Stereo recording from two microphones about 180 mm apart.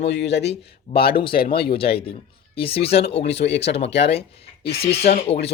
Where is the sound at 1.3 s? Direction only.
55° left (ahead or behind).